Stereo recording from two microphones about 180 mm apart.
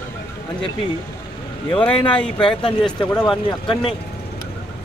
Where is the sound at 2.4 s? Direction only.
30° left (ahead or behind).